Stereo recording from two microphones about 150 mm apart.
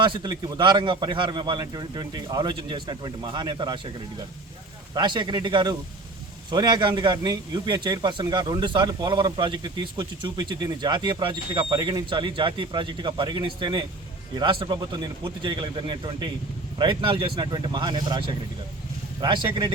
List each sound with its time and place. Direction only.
0.0 s a man's voice: 30° right (ahead or behind)
4.9 s a man's voice: 30° right (ahead or behind)